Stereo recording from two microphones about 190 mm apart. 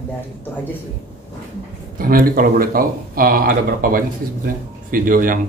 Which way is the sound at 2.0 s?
50° right (ahead or behind).